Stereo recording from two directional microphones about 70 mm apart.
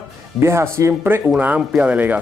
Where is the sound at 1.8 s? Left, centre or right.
Right.